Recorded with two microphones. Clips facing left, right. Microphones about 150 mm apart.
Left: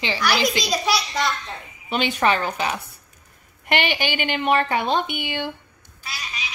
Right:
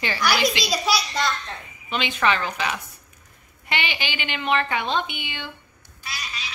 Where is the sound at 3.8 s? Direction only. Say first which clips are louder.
Left 6 dB; 50° left (ahead or behind).